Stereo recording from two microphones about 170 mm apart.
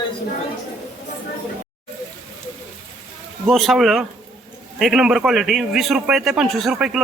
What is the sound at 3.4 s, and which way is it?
A man's voice, centre (ahead or behind).